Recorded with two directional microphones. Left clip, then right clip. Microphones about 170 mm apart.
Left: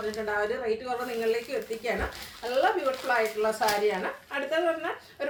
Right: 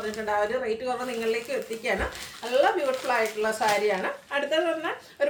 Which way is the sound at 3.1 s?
15° right (ahead or behind).